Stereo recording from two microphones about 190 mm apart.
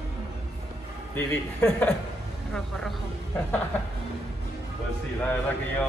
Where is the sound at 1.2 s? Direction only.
5° left (ahead or behind).